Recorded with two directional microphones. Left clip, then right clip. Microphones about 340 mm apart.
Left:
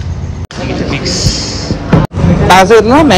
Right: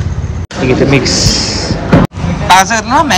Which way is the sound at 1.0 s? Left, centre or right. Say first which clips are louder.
Right 3 dB; centre.